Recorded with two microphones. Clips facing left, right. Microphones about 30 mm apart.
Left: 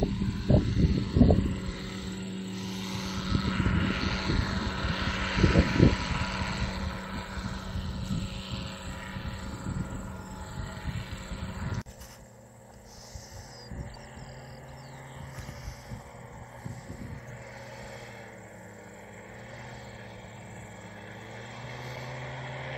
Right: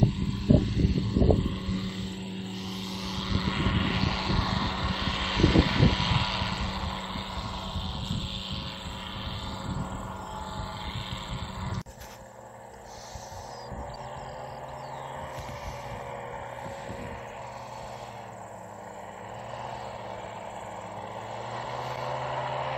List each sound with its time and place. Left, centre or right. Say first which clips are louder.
0.0 s vehicle: right 2 dB; centre
1.4 s vehicle: right 2 dB; right
3.3 s vehicle: even; centre
3.5 s vehicle: right 3 dB; right
4.7 s vehicle: right 2 dB; centre
5.7 s vehicle: even; right
21.5 s vehicle: right 8 dB; right